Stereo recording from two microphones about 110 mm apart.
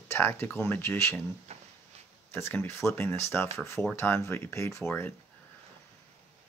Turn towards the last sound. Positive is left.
turn(degrees=20)  # may be behind; listen again after turning